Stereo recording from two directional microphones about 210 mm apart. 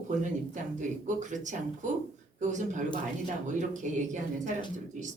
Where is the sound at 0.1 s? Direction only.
35° right (ahead or behind).